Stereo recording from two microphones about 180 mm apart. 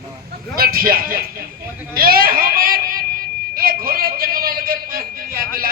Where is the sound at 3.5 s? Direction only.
55° right (ahead or behind).